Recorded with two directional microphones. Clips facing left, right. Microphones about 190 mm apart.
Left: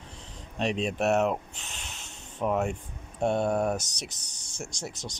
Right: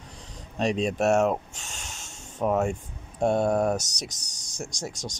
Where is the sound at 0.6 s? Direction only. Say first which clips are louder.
Right 3 dB; 40° right (ahead or behind).